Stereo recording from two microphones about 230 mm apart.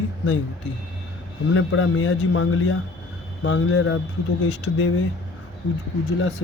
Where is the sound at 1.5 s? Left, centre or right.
Left.